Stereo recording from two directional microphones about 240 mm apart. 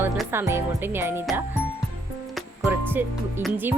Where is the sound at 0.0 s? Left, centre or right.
Centre.